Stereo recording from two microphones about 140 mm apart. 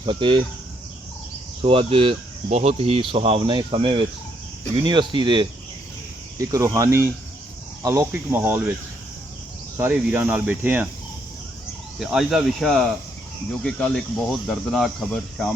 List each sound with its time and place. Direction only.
0.0 s speech: 35° right (ahead or behind)
1.6 s speech: 45° right (ahead or behind)
6.5 s speech: 20° right (ahead or behind)
9.9 s speech: 10° right (ahead or behind)
11.9 s speech: 5° right (ahead or behind)